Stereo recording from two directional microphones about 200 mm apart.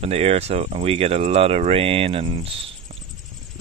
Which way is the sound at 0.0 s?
30° right (ahead or behind).